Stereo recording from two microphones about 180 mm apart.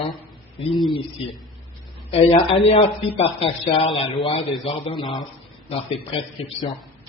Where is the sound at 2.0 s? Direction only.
35° left (ahead or behind).